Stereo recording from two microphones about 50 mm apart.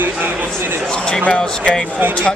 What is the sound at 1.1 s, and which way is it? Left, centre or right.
Speech, left.